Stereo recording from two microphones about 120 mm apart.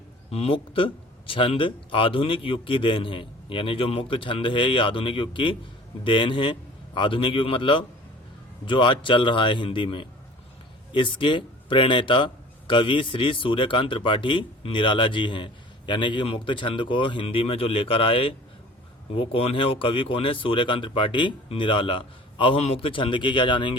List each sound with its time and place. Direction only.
0.3 s a man's voice: 55° left (ahead or behind)